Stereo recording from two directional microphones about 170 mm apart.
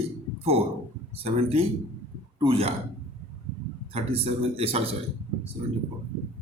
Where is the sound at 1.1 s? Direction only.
35° right (ahead or behind).